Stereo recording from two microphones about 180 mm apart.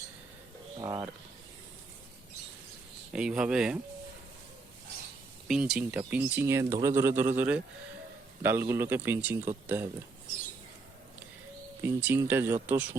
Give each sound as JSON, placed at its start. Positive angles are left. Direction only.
{"t": 0.8, "sound": "speech", "side_deg": -20}
{"t": 3.1, "sound": "speech", "side_deg": -5}
{"t": 5.5, "sound": "speech", "side_deg": -5}
{"t": 11.8, "sound": "speech", "side_deg": -10}